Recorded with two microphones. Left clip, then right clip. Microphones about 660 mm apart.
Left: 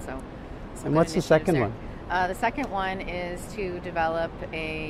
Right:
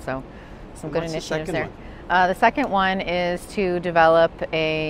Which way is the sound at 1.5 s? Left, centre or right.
Right.